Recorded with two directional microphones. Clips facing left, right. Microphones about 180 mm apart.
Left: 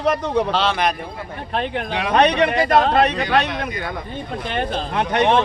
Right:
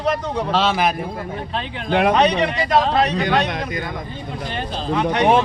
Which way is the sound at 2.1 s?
60° left (ahead or behind).